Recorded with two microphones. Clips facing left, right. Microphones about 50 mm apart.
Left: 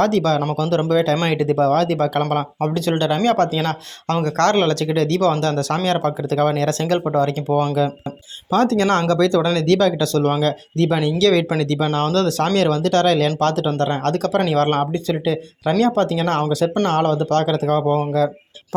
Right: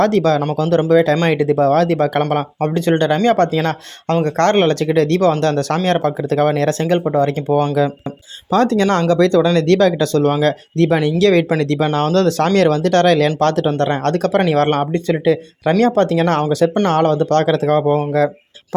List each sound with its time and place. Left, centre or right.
0.0 s speech: right
4.1 s speech: right
7.5 s speech: right